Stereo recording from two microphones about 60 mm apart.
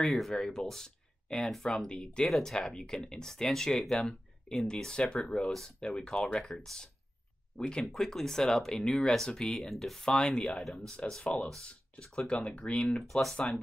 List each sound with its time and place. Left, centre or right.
0.0 s speech: centre
10.5 s speech: centre
12.3 s speech: centre